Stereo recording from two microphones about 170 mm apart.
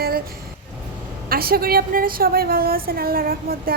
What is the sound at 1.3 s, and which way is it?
A woman's voice, 60° right (ahead or behind).